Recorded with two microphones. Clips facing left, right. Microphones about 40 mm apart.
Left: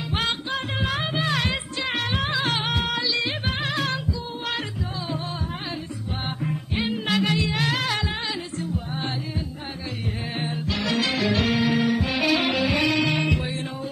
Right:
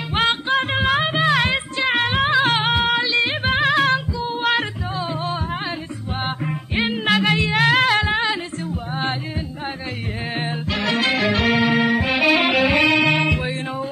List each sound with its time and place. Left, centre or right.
0.1 s music: right
0.9 s music: right
7.1 s music: right
10.4 s music: right